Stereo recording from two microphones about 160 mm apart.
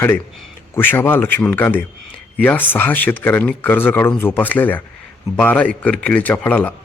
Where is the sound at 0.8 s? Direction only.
10° left (ahead or behind).